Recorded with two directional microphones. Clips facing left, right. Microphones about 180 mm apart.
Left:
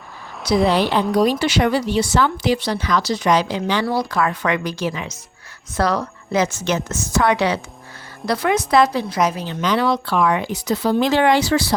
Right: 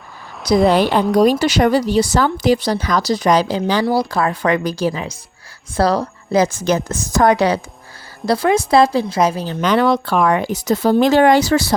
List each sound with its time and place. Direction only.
0.7 s a woman's voice: 45° right (ahead or behind)
9.6 s speech: 55° right (ahead or behind)